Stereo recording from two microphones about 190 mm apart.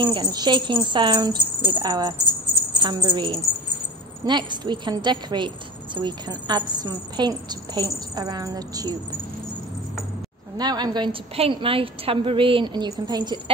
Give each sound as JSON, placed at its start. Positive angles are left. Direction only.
{"t": 0.0, "sound": "a woman's voice", "side_deg": -25}
{"t": 10.6, "sound": "a woman's voice", "side_deg": -20}